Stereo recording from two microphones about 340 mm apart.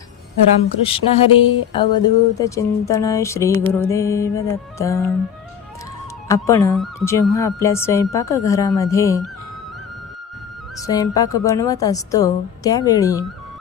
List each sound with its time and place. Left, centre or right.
0.8 s speech: centre
6.2 s speech: centre
10.8 s speech: centre